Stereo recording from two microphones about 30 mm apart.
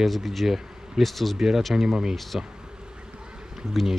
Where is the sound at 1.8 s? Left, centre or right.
Centre.